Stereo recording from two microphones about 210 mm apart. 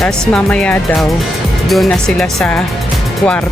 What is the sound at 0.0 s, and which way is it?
Speech, 5° left (ahead or behind).